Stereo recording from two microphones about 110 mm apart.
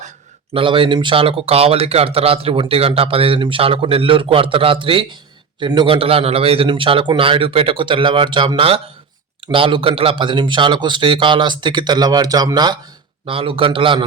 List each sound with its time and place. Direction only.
0.5 s speech: 50° right (ahead or behind)
13.2 s speech: 55° right (ahead or behind)